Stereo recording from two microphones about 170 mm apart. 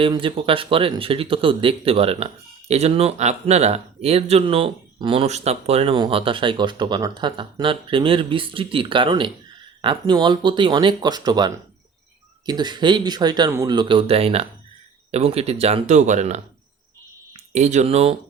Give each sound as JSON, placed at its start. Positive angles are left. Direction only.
{"t": 0.0, "sound": "speech", "side_deg": -30}